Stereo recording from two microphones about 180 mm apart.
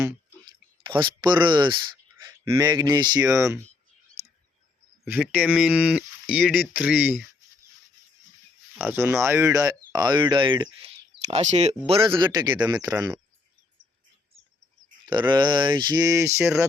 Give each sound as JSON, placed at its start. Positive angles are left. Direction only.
{"t": 0.0, "sound": "a sound", "side_deg": -25}
{"t": 2.2, "sound": "speech", "side_deg": -20}
{"t": 5.0, "sound": "speech", "side_deg": -10}
{"t": 8.8, "sound": "speech", "side_deg": -15}
{"t": 10.8, "sound": "a sound", "side_deg": -35}
{"t": 11.9, "sound": "speech", "side_deg": -30}
{"t": 15.0, "sound": "speech", "side_deg": -25}